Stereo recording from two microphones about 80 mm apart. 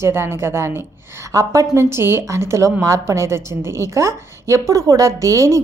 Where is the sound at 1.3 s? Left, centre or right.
Right.